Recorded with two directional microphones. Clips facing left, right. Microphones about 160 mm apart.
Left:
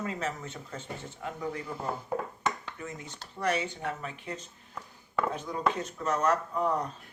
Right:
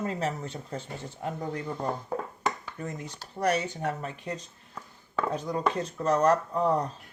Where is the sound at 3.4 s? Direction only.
40° right (ahead or behind).